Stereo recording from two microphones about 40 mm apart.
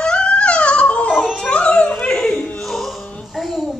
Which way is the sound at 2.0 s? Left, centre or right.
Centre.